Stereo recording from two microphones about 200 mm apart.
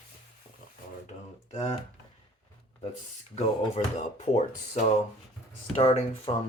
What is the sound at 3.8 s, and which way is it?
Speech, 35° left (ahead or behind).